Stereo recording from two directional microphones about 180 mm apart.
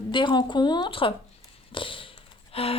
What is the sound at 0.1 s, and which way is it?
A woman's voice, 25° left (ahead or behind).